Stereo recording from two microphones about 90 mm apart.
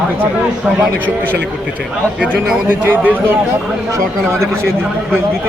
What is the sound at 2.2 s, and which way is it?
Speech, 20° right (ahead or behind).